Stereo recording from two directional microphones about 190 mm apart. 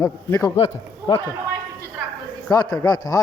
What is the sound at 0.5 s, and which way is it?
Speech, 30° left (ahead or behind).